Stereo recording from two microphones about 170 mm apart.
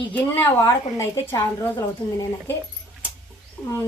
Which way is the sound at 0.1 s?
15° left (ahead or behind).